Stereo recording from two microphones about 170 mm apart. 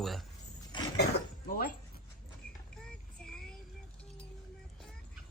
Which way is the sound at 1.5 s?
60° left (ahead or behind).